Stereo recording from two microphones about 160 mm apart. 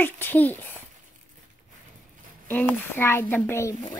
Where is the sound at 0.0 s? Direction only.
10° left (ahead or behind).